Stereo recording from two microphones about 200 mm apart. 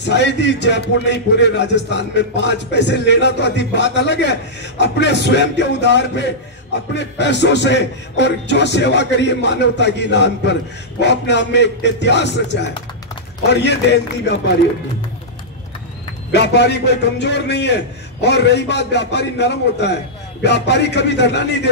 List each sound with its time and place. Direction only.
0.0 s a man's voice: 60° left (ahead or behind)
16.3 s a man's voice: 60° left (ahead or behind)